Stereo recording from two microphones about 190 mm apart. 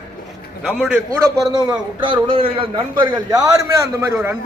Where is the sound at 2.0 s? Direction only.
25° right (ahead or behind).